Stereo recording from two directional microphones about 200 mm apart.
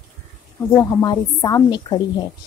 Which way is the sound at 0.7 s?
20° left (ahead or behind).